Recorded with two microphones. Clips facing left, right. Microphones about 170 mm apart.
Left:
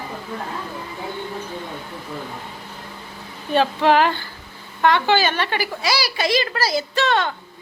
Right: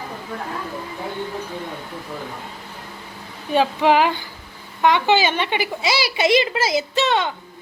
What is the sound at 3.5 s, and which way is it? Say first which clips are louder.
A woman's voice: even; 10° right (ahead or behind).